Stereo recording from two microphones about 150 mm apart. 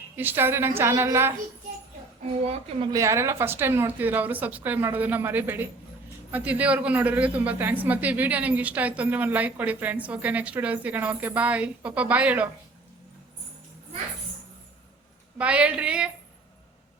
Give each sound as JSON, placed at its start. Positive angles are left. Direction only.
{"t": 0.2, "sound": "a woman's voice", "side_deg": -15}
{"t": 2.4, "sound": "a woman's voice", "side_deg": -45}
{"t": 2.9, "sound": "a woman's voice", "side_deg": -20}
{"t": 15.4, "sound": "a woman's voice", "side_deg": -10}